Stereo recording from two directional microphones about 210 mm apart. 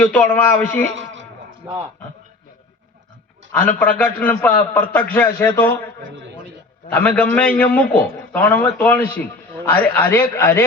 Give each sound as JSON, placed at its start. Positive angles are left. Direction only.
{"t": 0.0, "sound": "a man's voice", "side_deg": 10}
{"t": 0.9, "sound": "a sound", "side_deg": -60}
{"t": 1.6, "sound": "speech", "side_deg": -15}
{"t": 3.5, "sound": "a man's voice", "side_deg": 5}
{"t": 6.0, "sound": "a man's voice", "side_deg": -65}
{"t": 6.9, "sound": "a man's voice", "side_deg": 5}